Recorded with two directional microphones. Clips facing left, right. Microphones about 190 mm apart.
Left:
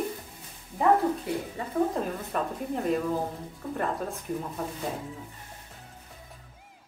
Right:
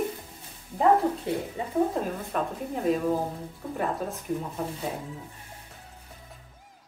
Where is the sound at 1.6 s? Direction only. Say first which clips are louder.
Right 2 dB; 20° right (ahead or behind).